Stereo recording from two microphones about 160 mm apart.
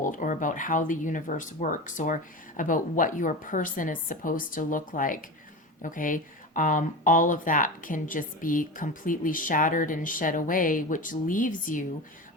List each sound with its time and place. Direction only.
0.0 s speech: 55° left (ahead or behind)